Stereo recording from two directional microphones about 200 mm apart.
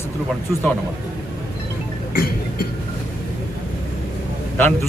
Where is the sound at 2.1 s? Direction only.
50° left (ahead or behind).